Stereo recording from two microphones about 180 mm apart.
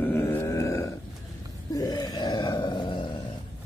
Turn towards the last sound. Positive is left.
turn(degrees=25)  # may be behind; listen again after turning